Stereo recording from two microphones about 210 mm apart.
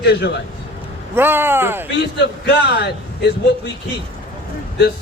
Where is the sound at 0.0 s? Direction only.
50° left (ahead or behind).